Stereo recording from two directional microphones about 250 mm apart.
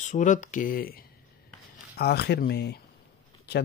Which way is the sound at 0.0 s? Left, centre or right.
Left.